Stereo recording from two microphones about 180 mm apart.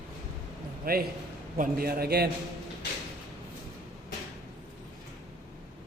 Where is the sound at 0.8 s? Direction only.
55° right (ahead or behind).